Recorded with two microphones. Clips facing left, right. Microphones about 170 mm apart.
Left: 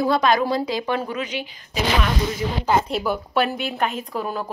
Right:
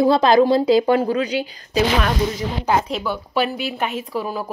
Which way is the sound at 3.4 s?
5° right (ahead or behind).